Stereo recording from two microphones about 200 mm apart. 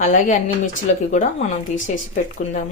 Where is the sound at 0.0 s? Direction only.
40° left (ahead or behind).